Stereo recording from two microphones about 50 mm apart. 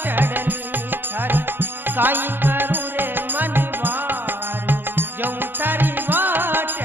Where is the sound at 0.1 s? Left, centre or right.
Right.